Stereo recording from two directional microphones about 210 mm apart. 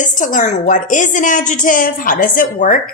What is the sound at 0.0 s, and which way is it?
A woman's voice, 40° left (ahead or behind).